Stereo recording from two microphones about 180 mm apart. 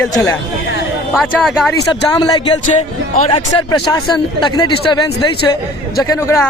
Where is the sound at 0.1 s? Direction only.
15° left (ahead or behind).